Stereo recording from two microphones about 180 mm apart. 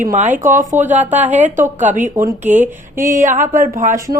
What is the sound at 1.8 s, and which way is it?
A woman's voice, 45° right (ahead or behind).